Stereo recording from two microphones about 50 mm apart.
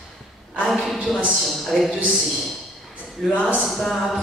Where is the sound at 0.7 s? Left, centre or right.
Centre.